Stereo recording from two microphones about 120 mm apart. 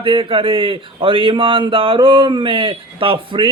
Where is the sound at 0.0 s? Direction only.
45° right (ahead or behind).